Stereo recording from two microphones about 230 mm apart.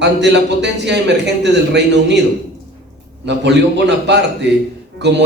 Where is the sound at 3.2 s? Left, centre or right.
Right.